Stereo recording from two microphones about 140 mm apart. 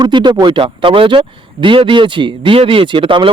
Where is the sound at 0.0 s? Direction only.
35° right (ahead or behind).